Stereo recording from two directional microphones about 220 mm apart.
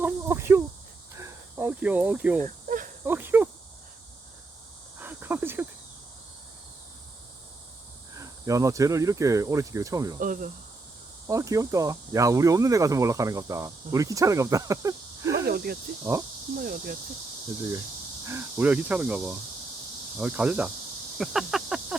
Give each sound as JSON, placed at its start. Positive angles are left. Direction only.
{"t": 0.0, "sound": "a sound", "side_deg": -10}
{"t": 2.4, "sound": "cricket", "side_deg": -35}
{"t": 3.0, "sound": "cricket", "side_deg": -10}
{"t": 4.9, "sound": "a sound", "side_deg": -10}
{"t": 8.1, "sound": "speech", "side_deg": -15}
{"t": 10.2, "sound": "speech", "side_deg": -40}
{"t": 11.3, "sound": "speech", "side_deg": -15}
{"t": 15.4, "sound": "speech", "side_deg": -45}
{"t": 16.1, "sound": "speech", "side_deg": -15}
{"t": 16.6, "sound": "speech", "side_deg": -40}
{"t": 18.3, "sound": "speech", "side_deg": -10}
{"t": 21.2, "sound": "a sound", "side_deg": 0}